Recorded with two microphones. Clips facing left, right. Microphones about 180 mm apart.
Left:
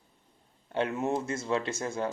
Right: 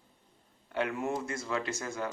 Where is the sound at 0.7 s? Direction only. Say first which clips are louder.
Left 3 dB; 25° left (ahead or behind).